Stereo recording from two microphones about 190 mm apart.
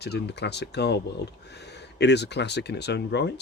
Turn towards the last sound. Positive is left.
turn(degrees=65)  # may be behind; listen again after turning